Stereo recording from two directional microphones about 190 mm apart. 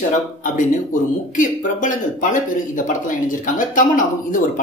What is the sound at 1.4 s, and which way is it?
Speech, 45° left (ahead or behind).